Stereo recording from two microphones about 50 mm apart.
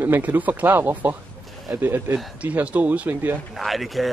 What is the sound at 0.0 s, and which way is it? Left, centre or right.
Speech, right.